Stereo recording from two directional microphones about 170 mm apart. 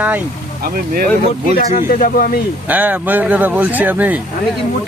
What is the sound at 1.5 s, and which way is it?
Speech, 55° left (ahead or behind).